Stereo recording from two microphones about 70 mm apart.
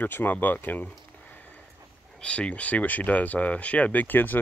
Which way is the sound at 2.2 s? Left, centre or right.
Centre.